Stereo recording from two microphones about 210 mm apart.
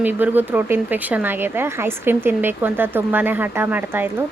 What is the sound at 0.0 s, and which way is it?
Speech, 10° right (ahead or behind).